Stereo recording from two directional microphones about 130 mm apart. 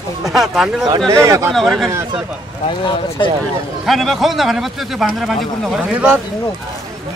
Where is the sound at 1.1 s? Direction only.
25° right (ahead or behind).